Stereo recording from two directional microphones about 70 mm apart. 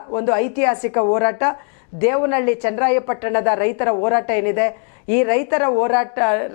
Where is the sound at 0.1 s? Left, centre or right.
Left.